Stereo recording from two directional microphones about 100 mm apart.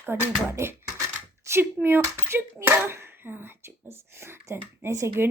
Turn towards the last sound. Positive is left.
turn(degrees=-25)  # may be behind; listen again after turning